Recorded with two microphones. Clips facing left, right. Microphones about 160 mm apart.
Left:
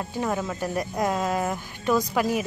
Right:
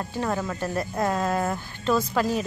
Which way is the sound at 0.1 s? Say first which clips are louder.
Even; 10° left (ahead or behind).